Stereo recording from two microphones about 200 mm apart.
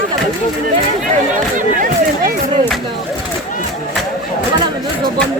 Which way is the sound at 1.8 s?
40° right (ahead or behind).